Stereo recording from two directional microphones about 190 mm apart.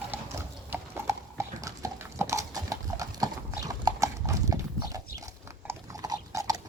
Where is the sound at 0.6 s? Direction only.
15° right (ahead or behind).